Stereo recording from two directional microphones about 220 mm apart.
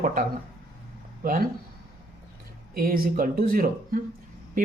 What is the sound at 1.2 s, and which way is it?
Speech, 40° right (ahead or behind).